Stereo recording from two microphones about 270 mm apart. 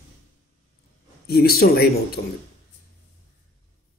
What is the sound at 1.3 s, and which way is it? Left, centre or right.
Speech, left.